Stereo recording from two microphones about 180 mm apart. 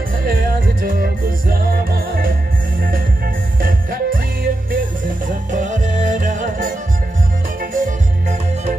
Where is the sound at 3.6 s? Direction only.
50° right (ahead or behind).